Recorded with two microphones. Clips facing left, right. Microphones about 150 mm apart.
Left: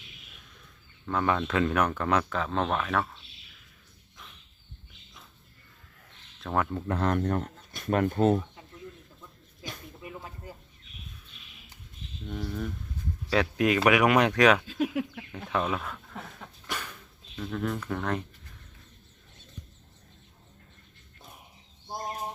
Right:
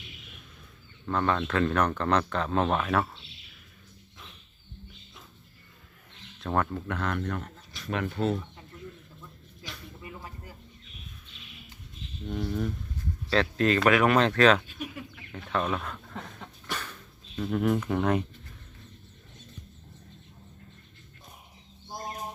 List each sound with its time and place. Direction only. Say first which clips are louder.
1.0 s speech: even; 5° left (ahead or behind)
6.4 s speech: right 1 dB; centre (ahead or behind)
6.7 s speech: left 4 dB; 35° left (ahead or behind)
10.0 s a sound: left 2 dB; 20° left (ahead or behind)
12.3 s speech: right 3 dB; 5° right (ahead or behind)
13.3 s speech: even; 10° left (ahead or behind)
14.7 s speech: left 10 dB; 90° left
15.4 s speech: even; 5° left (ahead or behind)
16.6 s dog: even; 10° left (ahead or behind)
17.3 s speech: right 6 dB; 10° right (ahead or behind)